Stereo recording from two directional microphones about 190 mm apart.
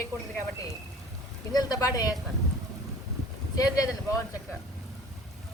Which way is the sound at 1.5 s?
20° left (ahead or behind).